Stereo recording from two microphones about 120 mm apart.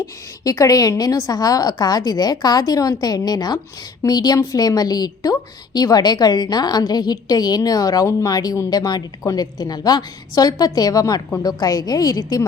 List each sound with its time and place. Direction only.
0.0 s a woman's voice: 30° left (ahead or behind)